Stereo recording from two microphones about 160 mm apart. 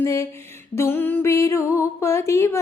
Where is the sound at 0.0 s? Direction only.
15° left (ahead or behind).